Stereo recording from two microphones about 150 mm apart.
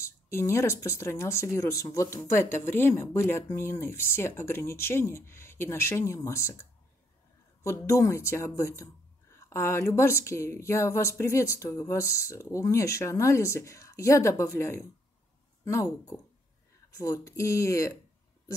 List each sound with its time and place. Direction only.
0.0 s speech: 20° left (ahead or behind)
17.0 s speech: 20° left (ahead or behind)